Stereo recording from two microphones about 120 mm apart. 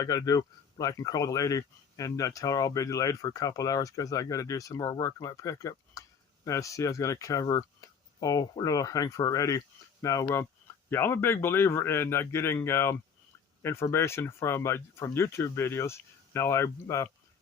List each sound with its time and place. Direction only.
0.0 s speech: 30° left (ahead or behind)